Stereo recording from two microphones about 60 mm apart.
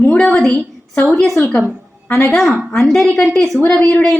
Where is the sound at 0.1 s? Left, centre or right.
Centre.